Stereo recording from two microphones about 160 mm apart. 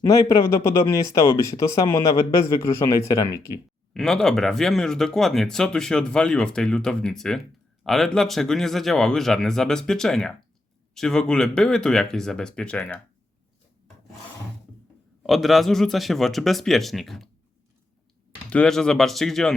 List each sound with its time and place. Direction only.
0.0 s speech: 15° left (ahead or behind)
3.9 s speech: centre (ahead or behind)
15.2 s speech: centre (ahead or behind)
18.5 s speech: 5° left (ahead or behind)